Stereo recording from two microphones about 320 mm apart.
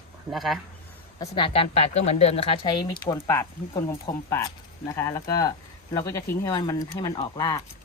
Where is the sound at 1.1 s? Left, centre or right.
Centre.